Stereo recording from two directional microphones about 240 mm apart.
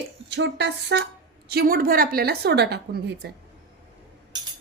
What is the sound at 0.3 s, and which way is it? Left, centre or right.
A woman's voice, right.